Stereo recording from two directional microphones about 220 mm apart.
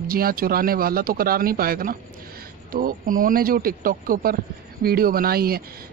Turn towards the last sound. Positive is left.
turn(degrees=-45)  # may be behind; listen again after turning